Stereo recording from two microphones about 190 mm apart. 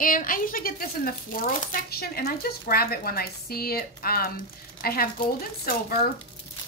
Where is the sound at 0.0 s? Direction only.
45° left (ahead or behind).